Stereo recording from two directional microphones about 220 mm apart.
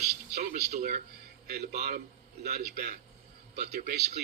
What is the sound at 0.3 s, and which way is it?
Speech, 30° right (ahead or behind).